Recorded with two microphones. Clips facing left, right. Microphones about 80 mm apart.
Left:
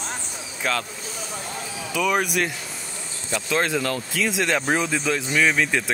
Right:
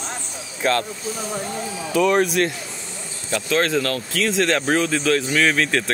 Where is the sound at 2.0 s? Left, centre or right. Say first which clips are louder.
Right 5 dB; centre.